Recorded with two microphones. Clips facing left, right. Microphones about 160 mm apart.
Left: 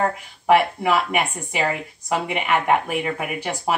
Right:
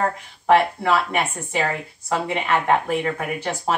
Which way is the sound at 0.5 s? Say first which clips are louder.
Even; 10° left (ahead or behind).